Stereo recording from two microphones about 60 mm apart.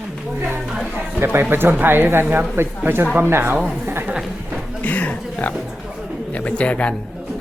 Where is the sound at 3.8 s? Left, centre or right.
Right.